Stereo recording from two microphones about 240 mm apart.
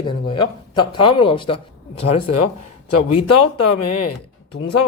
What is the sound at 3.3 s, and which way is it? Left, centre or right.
Speech, left.